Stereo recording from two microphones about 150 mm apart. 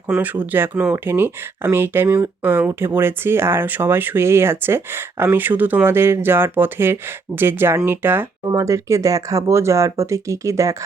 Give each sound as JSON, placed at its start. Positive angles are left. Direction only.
{"t": 0.1, "sound": "speech", "side_deg": -5}